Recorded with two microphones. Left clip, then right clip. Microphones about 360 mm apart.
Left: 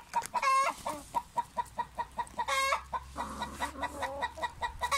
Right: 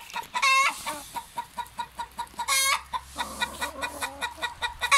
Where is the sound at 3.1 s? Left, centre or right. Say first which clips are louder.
Right 7 dB; left.